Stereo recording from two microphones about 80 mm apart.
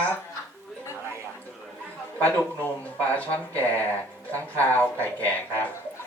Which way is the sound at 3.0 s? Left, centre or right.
Centre.